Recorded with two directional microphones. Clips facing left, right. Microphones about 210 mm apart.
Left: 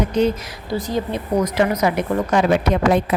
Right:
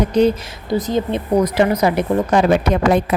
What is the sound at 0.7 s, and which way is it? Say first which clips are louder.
A woman's voice: right 4 dB; 20° right (ahead or behind).